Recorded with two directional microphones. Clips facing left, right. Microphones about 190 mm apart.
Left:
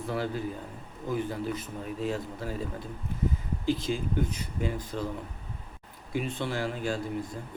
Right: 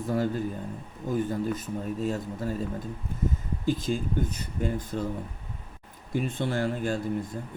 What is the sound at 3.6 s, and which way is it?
A man's voice, 45° right (ahead or behind).